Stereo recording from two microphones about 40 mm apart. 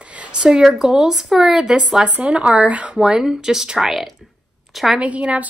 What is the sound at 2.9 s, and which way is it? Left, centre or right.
Speech, centre.